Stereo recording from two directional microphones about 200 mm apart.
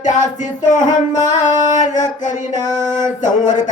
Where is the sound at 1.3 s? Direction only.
40° left (ahead or behind).